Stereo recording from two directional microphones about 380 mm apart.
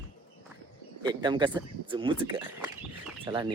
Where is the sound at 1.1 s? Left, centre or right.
Centre.